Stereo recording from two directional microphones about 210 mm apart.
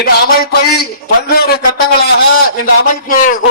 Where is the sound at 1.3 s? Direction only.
50° left (ahead or behind).